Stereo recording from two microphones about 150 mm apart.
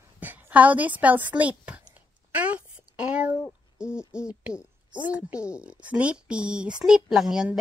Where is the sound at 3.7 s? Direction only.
5° right (ahead or behind).